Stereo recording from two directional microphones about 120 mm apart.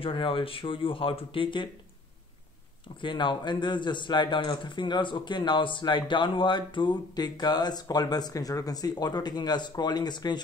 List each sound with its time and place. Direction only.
0.0 s speech: 45° left (ahead or behind)
3.0 s speech: 40° left (ahead or behind)